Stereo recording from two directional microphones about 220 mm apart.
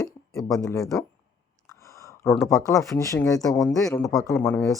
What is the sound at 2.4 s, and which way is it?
Speech, 15° left (ahead or behind).